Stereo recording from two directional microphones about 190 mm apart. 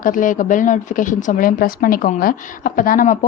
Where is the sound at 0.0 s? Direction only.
45° left (ahead or behind).